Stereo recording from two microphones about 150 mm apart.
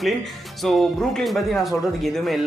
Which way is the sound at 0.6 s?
Centre (ahead or behind).